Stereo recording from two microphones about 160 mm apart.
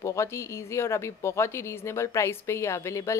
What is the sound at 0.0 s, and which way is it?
Speech, 15° left (ahead or behind).